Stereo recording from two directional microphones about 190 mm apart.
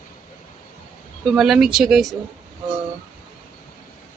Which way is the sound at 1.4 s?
5° right (ahead or behind).